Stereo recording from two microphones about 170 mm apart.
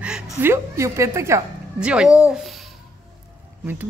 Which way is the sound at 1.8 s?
5° right (ahead or behind).